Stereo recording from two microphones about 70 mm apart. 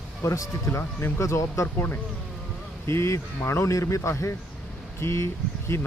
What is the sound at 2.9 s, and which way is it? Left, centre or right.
Speech, left.